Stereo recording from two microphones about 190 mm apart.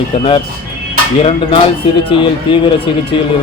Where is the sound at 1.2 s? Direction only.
25° left (ahead or behind).